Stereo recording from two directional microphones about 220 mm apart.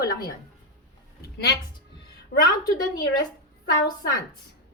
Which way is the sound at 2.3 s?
45° left (ahead or behind).